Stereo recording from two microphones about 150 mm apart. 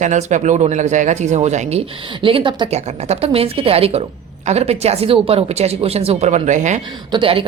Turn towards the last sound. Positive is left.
turn(degrees=-35)  # may be behind; listen again after turning